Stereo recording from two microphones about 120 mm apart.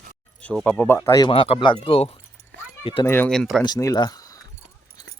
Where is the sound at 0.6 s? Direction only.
15° left (ahead or behind).